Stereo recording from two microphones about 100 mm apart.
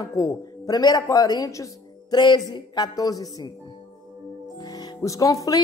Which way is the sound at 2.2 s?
45° left (ahead or behind).